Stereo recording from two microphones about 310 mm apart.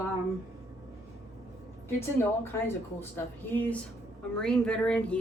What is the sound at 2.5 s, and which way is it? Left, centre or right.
Speech, centre.